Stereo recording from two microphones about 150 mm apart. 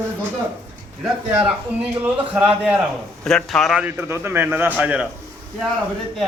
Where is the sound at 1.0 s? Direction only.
5° right (ahead or behind).